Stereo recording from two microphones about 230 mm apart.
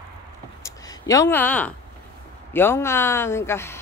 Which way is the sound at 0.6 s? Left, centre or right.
Centre.